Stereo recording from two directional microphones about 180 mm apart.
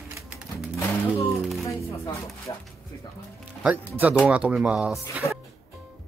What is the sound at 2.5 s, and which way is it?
Speech, 20° left (ahead or behind).